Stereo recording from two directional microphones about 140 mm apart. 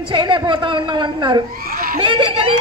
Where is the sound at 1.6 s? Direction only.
90° right.